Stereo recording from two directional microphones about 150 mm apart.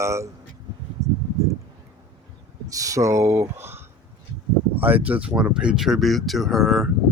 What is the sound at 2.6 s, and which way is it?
Speech, 20° right (ahead or behind).